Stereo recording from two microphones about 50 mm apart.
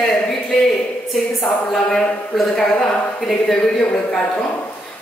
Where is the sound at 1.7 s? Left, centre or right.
Centre.